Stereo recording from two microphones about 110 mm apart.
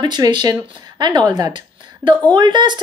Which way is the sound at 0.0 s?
40° right (ahead or behind).